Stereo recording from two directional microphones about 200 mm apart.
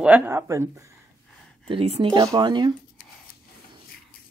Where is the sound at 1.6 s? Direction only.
30° right (ahead or behind).